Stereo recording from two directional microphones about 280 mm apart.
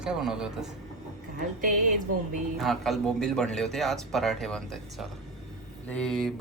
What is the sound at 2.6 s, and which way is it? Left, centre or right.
A man's voice, centre.